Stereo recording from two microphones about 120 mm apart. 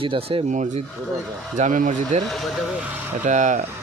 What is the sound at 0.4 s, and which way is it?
Speech, 85° right.